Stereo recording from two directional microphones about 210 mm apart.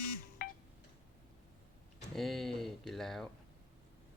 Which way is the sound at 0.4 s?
45° left (ahead or behind).